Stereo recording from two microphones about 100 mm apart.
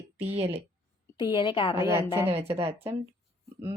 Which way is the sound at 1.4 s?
55° left (ahead or behind).